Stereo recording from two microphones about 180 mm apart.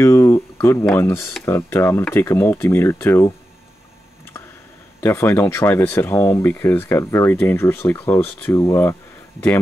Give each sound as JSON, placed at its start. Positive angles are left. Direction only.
{"t": 0.0, "sound": "a sound", "side_deg": 15}
{"t": 0.9, "sound": "speech", "side_deg": 15}
{"t": 5.0, "sound": "speech", "side_deg": 15}